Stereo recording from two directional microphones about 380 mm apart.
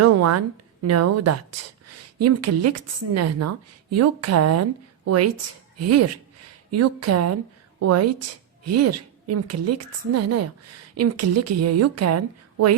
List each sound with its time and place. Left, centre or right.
0.0 s a woman's voice: right